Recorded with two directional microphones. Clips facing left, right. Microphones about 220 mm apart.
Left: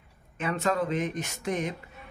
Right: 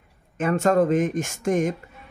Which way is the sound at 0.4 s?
45° right (ahead or behind).